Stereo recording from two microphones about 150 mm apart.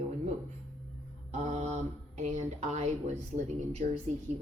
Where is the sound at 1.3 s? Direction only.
50° right (ahead or behind).